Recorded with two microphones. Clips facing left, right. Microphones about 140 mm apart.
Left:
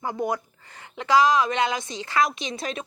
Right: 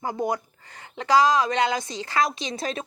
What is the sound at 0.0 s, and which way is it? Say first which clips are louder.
Speech: even; 30° right (ahead or behind).